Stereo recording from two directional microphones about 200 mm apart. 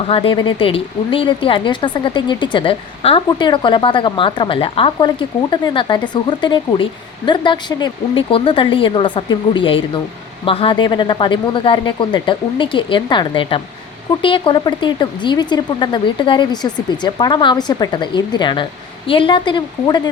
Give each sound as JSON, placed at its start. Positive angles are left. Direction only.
{"t": 0.1, "sound": "speech", "side_deg": 25}